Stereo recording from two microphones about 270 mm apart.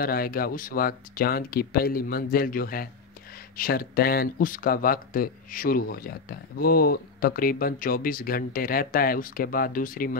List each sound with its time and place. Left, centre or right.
0.0 s speech: left